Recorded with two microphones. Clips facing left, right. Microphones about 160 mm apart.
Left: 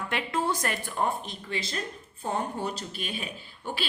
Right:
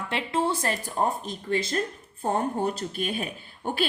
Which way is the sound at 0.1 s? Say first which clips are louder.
Right 3 dB; 30° right (ahead or behind).